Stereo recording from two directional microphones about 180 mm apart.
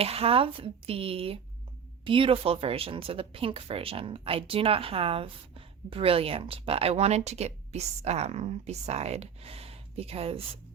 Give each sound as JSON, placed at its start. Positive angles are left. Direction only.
{"t": 0.0, "sound": "speech", "side_deg": -35}